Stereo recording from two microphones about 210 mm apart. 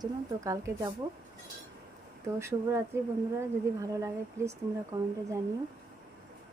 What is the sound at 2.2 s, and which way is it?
A woman's voice, 15° right (ahead or behind).